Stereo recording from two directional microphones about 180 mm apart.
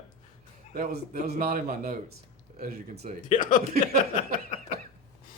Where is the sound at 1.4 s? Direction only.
55° right (ahead or behind).